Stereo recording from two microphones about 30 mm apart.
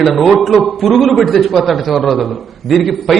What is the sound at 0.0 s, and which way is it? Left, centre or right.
A man's voice, centre.